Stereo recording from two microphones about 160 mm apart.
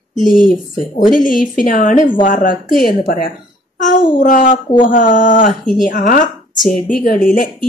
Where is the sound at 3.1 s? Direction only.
70° left (ahead or behind).